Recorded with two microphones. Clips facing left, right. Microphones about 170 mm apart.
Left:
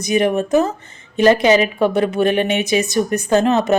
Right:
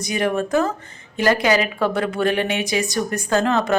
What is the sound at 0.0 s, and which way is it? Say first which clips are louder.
Speech: left 5 dB; 20° left (ahead or behind).